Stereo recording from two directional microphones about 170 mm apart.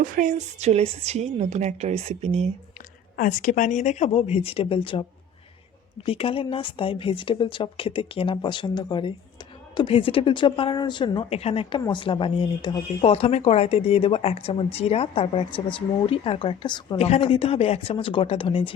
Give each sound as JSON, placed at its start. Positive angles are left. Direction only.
{"t": 0.0, "sound": "a woman's voice", "side_deg": -50}
{"t": 3.2, "sound": "speech", "side_deg": 50}
{"t": 17.0, "sound": "speech", "side_deg": 35}